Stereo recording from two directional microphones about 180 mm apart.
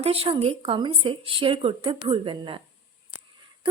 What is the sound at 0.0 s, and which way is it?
Speech, 35° right (ahead or behind).